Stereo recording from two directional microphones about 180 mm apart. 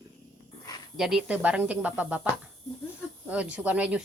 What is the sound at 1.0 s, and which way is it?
Speech, centre (ahead or behind).